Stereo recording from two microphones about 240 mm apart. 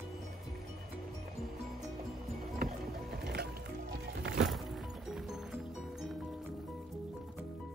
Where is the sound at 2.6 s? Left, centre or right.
Right.